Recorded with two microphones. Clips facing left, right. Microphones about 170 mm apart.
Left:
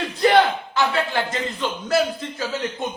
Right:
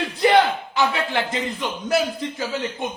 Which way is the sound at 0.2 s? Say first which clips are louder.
Even; 15° right (ahead or behind).